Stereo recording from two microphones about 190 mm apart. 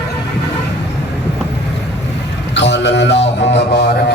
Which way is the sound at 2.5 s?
65° left (ahead or behind).